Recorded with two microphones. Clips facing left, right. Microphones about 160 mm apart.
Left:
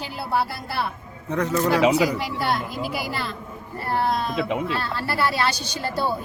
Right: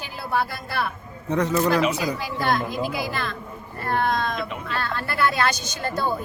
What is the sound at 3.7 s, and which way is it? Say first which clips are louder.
A woman's voice: even; 30° left (ahead or behind).